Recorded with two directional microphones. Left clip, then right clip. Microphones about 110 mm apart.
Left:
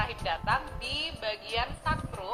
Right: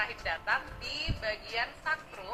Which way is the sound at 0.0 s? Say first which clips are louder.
Left 2 dB; 45° left (ahead or behind).